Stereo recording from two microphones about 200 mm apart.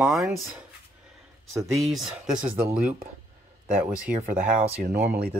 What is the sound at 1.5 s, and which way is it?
Speech, 15° right (ahead or behind).